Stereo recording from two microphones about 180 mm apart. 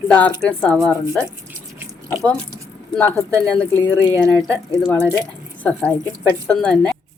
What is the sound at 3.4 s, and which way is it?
Speech, 5° left (ahead or behind).